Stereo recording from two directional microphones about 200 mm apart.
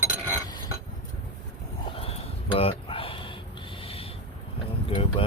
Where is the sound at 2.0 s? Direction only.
30° left (ahead or behind).